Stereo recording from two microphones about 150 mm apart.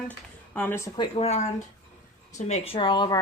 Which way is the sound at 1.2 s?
45° left (ahead or behind).